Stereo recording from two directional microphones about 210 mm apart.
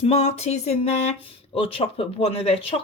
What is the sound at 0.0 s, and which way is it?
A woman's voice, 30° left (ahead or behind).